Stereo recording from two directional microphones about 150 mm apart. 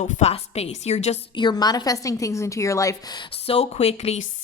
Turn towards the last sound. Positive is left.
turn(degrees=45)  # may be behind; listen again after turning